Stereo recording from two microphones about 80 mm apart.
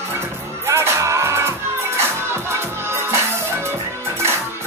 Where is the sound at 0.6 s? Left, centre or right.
Right.